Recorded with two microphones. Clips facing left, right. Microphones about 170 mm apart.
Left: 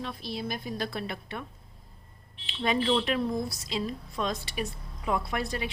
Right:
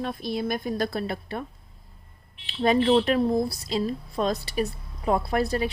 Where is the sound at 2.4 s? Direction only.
40° right (ahead or behind).